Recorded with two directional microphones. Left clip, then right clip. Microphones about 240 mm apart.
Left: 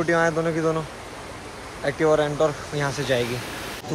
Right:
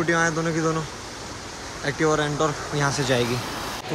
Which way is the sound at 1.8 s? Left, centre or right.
Centre.